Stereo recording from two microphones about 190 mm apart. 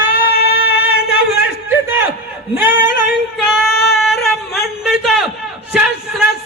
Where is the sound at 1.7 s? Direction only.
10° right (ahead or behind).